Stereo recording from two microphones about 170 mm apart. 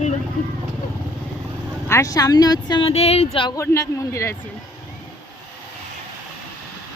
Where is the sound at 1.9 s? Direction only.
20° left (ahead or behind); by 3.5 s 35° left (ahead or behind).